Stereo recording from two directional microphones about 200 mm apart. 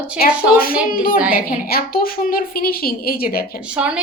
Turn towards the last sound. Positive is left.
turn(degrees=-5)  # may be behind; listen again after turning